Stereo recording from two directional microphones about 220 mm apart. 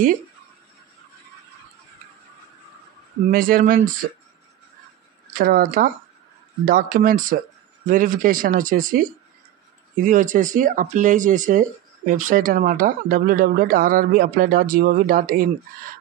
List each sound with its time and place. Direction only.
3.3 s speech: 40° right (ahead or behind)
5.4 s speech: 40° right (ahead or behind)
10.0 s speech: 35° right (ahead or behind)